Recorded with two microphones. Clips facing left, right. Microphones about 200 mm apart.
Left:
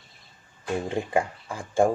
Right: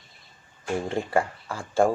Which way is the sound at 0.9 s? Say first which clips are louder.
Right 1 dB; 15° left (ahead or behind).